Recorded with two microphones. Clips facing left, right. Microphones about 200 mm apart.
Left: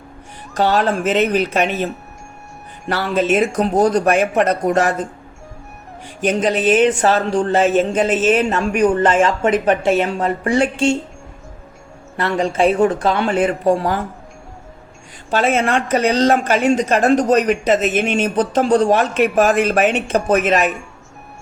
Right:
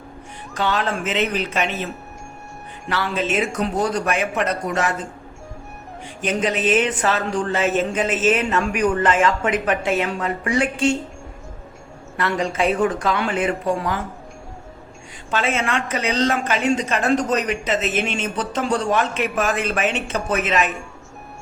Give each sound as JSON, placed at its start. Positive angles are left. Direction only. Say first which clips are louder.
{"t": 0.5, "sound": "speech", "louder": "left 6 dB", "side_deg": 40}
{"t": 2.9, "sound": "speech", "louder": "left 6 dB", "side_deg": 45}
{"t": 6.2, "sound": "a woman's voice", "louder": "left 5 dB", "side_deg": 35}
{"t": 12.1, "sound": "a woman's voice", "louder": "left 4 dB", "side_deg": 30}
{"t": 15.3, "sound": "a woman's voice", "louder": "left 6 dB", "side_deg": 40}